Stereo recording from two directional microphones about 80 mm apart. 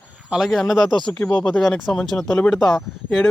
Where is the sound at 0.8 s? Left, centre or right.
Left.